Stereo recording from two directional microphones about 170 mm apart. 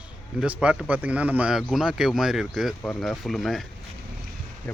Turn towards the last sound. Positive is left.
turn(degrees=0)  # may be behind; listen again after turning